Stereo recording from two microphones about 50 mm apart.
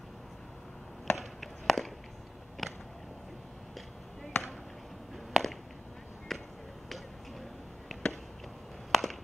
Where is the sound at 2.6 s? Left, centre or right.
Centre.